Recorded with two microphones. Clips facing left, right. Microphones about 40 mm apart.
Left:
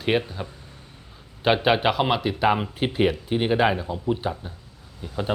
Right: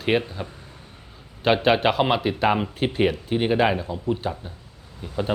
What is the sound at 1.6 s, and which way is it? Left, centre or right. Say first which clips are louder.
Speech: right 2 dB; centre.